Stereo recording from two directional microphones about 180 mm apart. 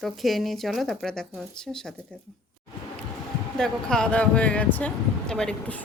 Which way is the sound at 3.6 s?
5° left (ahead or behind).